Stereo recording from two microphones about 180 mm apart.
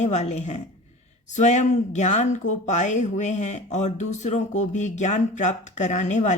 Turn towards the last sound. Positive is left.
turn(degrees=40)  # may be behind; listen again after turning